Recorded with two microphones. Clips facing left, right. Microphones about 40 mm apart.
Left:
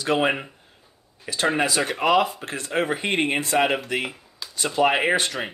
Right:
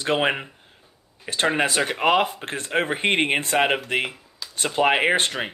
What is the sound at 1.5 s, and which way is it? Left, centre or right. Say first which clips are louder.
Speech: right 1 dB; right.